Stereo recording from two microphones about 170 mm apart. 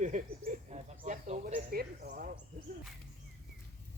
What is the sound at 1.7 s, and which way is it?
Speech, 65° right (ahead or behind).